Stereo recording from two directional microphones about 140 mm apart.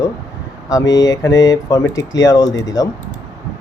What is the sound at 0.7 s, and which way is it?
Speech, 25° left (ahead or behind).